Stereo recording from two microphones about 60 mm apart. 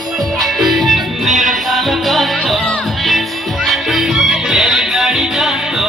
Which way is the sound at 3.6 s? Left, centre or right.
Centre.